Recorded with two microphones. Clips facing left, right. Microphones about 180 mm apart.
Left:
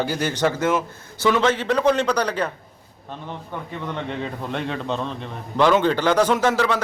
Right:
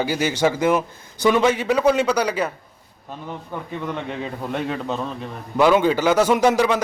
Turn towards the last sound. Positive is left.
turn(degrees=-15)  # may be behind; listen again after turning